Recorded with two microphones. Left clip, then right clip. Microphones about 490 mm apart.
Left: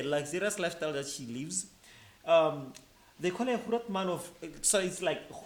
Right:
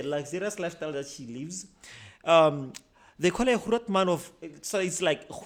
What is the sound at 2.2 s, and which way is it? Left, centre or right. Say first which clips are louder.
Speech: right 5 dB; right.